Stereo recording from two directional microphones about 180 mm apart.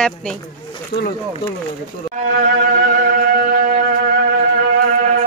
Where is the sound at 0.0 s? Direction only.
5° left (ahead or behind).